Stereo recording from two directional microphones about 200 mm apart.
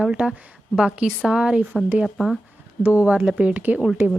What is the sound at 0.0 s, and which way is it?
Speech, 5° right (ahead or behind).